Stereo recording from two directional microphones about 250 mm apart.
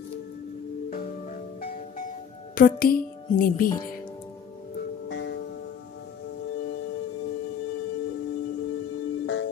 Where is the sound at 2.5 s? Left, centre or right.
Left.